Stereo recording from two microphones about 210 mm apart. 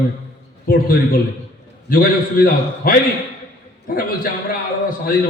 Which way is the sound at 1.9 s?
45° left (ahead or behind).